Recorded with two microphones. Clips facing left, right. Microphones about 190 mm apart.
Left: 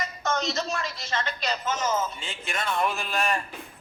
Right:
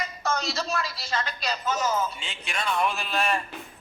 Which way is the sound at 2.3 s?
20° left (ahead or behind).